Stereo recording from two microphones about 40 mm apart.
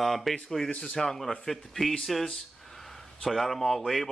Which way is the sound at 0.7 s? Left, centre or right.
Left.